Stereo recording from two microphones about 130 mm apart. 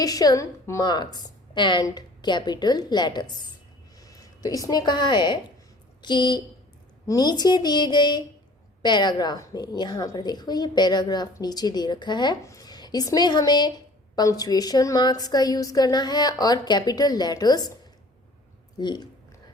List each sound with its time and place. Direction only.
0.0 s a woman's voice: 30° left (ahead or behind)
18.8 s a woman's voice: 35° left (ahead or behind)